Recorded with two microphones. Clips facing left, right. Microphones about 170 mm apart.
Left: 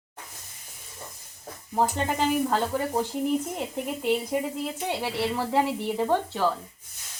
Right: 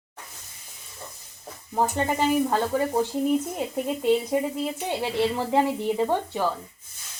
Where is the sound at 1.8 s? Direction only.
15° right (ahead or behind).